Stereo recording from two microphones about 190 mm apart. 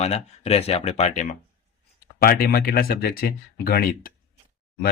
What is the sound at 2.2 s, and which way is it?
Speech, 50° left (ahead or behind).